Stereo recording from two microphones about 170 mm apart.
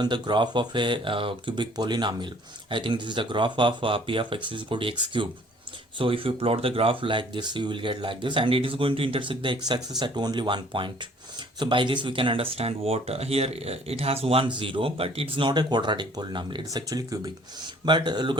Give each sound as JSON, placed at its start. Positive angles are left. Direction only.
{"t": 0.0, "sound": "speech", "side_deg": -25}